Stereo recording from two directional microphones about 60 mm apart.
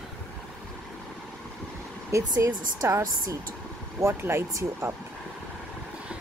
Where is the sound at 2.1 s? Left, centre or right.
Right.